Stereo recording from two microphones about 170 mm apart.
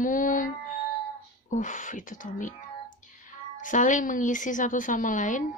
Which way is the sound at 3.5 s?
50° left (ahead or behind).